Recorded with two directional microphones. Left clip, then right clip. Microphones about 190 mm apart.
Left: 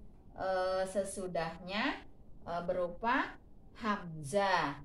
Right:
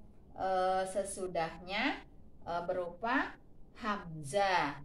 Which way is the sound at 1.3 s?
20° left (ahead or behind).